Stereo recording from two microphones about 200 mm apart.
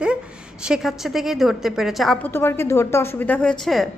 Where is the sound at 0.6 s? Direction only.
Centre (ahead or behind).